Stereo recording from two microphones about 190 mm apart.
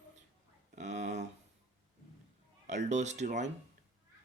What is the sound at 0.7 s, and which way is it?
Speech, 40° right (ahead or behind).